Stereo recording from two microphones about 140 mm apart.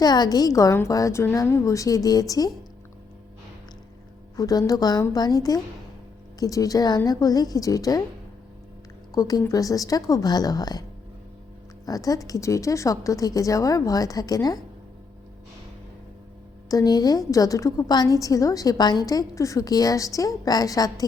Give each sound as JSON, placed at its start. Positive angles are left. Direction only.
{"t": 0.0, "sound": "a woman's voice", "side_deg": 30}
{"t": 4.4, "sound": "a woman's voice", "side_deg": 25}
{"t": 9.1, "sound": "a woman's voice", "side_deg": 25}
{"t": 11.9, "sound": "a woman's voice", "side_deg": 25}
{"t": 16.6, "sound": "a woman's voice", "side_deg": 25}